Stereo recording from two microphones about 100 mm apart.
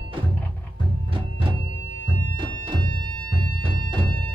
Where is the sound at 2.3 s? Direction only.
55° right (ahead or behind).